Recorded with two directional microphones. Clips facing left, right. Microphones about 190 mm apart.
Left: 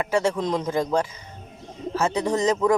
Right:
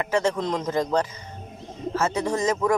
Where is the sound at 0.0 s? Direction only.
15° left (ahead or behind).